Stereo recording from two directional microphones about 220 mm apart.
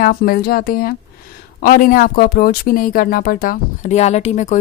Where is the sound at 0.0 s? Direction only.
40° left (ahead or behind).